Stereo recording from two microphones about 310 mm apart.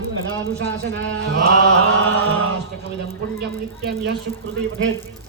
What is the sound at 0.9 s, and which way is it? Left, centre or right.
Speech, right.